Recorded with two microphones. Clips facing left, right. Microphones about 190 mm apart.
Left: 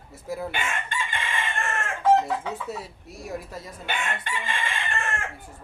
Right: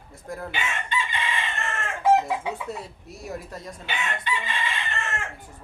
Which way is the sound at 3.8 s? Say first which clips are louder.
Right 1 dB; 50° left (ahead or behind).